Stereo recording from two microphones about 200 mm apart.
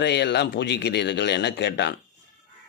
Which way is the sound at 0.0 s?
60° left (ahead or behind).